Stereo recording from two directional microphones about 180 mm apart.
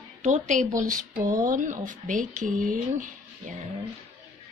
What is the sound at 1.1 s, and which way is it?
Speech, 20° right (ahead or behind).